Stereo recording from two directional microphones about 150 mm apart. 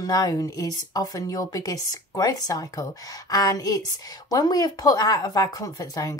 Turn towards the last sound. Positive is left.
turn(degrees=25)  # may be behind; listen again after turning